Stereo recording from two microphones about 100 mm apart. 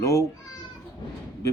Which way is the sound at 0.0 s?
30° left (ahead or behind).